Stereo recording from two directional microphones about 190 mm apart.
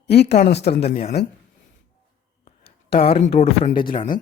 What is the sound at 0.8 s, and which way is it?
Speech, 50° left (ahead or behind).